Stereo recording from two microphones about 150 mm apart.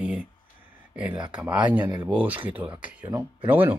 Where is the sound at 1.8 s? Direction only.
25° right (ahead or behind).